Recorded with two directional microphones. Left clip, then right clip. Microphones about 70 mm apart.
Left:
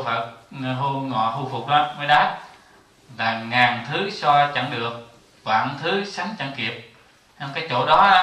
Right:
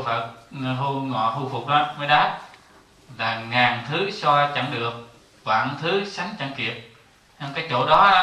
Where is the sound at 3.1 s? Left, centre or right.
Left.